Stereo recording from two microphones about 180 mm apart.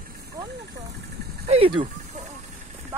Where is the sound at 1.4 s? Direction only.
30° right (ahead or behind).